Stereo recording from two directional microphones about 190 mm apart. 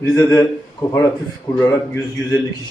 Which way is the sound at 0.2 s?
15° left (ahead or behind).